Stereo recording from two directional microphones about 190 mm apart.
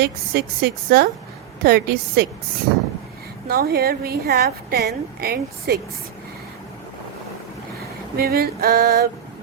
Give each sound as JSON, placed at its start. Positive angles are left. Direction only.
{"t": 0.0, "sound": "a woman's voice", "side_deg": -55}
{"t": 3.4, "sound": "a woman's voice", "side_deg": -55}
{"t": 8.1, "sound": "a sound", "side_deg": -55}